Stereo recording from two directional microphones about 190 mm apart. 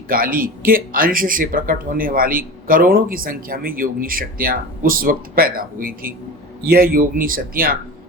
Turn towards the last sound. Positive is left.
turn(degrees=-50)  # may be behind; listen again after turning